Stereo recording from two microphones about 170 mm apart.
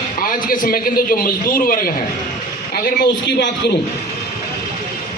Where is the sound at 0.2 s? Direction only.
55° left (ahead or behind).